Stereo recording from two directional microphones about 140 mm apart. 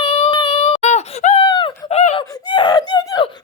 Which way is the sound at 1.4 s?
35° left (ahead or behind).